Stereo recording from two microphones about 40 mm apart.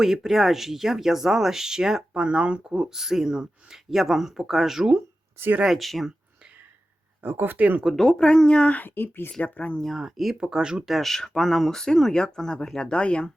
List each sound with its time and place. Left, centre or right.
0.0 s speech: centre
2.1 s speech: right
3.8 s speech: centre
7.2 s speech: right
7.6 s speech: right
7.9 s speech: centre
8.8 s speech: left
9.4 s speech: left
9.9 s speech: centre
10.4 s speech: centre
10.8 s speech: centre; by 13.2 s left